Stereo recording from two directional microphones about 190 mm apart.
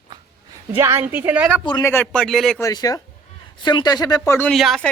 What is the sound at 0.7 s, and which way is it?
Speech, 10° right (ahead or behind).